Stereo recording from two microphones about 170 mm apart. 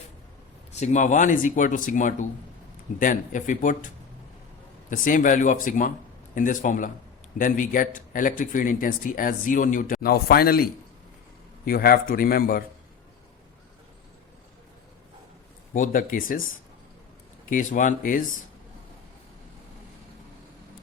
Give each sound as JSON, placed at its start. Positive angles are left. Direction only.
{"t": 0.8, "sound": "speech", "side_deg": 45}
{"t": 4.9, "sound": "a man's voice", "side_deg": 50}
{"t": 15.7, "sound": "speech", "side_deg": 50}
{"t": 17.5, "sound": "speech", "side_deg": 50}